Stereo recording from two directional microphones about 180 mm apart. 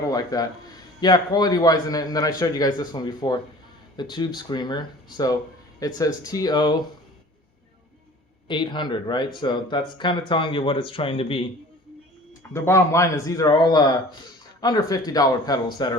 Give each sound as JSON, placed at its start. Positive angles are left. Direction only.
{"t": 0.1, "sound": "speech", "side_deg": 20}
{"t": 8.4, "sound": "speech", "side_deg": 25}
{"t": 12.4, "sound": "speech", "side_deg": 15}